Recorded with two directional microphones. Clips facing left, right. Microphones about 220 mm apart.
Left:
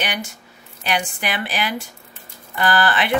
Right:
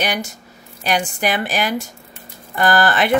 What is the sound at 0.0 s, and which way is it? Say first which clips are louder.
A woman's voice: right 4 dB; 40° right (ahead or behind).